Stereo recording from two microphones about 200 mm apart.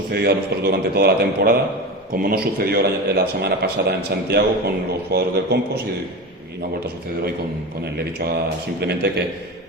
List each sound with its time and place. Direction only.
0.1 s a man's voice: 55° right (ahead or behind)
8.8 s a man's voice: 55° right (ahead or behind)